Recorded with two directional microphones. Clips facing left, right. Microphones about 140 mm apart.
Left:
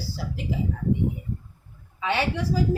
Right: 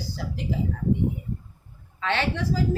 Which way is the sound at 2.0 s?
10° left (ahead or behind).